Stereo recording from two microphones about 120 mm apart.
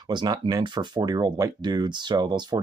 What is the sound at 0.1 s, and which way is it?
Speech, 35° right (ahead or behind).